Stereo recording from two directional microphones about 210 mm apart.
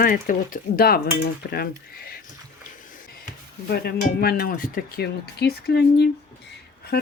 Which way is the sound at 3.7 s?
50° left (ahead or behind).